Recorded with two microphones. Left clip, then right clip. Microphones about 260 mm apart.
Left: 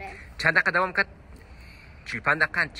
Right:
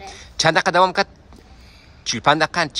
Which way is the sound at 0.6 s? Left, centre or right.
Centre.